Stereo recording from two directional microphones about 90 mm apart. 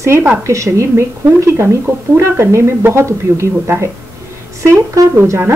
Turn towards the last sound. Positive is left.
turn(degrees=-30)  # may be behind; listen again after turning